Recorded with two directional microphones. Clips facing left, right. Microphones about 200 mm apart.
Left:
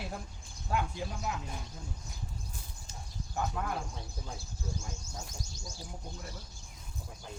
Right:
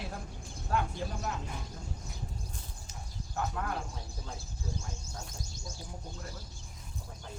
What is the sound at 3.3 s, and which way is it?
Speech, 5° left (ahead or behind).